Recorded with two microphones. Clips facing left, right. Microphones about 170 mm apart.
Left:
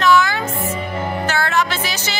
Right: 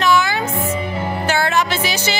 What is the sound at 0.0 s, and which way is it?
Music, 15° right (ahead or behind).